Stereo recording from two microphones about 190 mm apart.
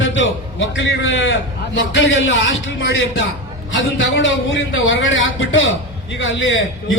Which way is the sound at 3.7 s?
75° left (ahead or behind).